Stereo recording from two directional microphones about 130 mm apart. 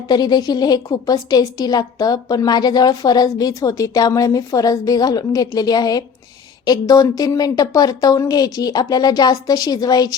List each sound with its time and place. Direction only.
0.1 s a woman's voice: 30° left (ahead or behind)